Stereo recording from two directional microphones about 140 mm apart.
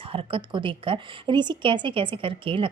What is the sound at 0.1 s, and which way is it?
A woman's voice, 40° right (ahead or behind).